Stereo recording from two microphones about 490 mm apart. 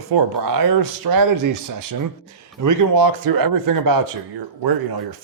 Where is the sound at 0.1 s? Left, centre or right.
Right.